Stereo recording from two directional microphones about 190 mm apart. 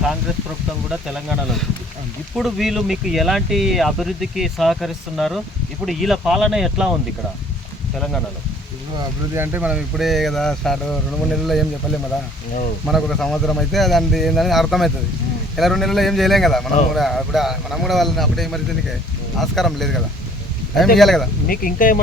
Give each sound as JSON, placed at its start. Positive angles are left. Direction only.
{"t": 0.9, "sound": "speech", "side_deg": -5}
{"t": 7.9, "sound": "speech", "side_deg": 0}
{"t": 9.3, "sound": "speech", "side_deg": -10}
{"t": 12.9, "sound": "speech", "side_deg": 0}
{"t": 21.4, "sound": "speech", "side_deg": 50}